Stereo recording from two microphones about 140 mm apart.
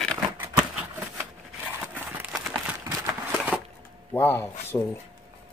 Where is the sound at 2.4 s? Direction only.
20° right (ahead or behind).